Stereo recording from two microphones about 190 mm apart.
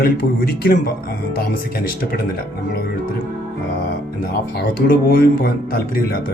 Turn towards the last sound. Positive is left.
turn(degrees=50)  # may be behind; listen again after turning